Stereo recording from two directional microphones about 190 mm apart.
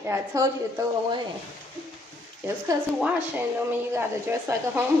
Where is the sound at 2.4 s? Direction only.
10° right (ahead or behind).